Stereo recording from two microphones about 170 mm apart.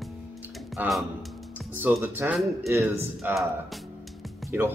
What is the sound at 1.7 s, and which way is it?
Speech, 15° right (ahead or behind).